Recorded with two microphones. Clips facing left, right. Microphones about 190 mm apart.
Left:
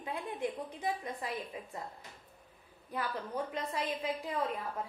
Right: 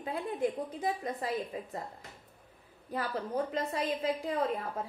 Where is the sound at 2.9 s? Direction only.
45° right (ahead or behind).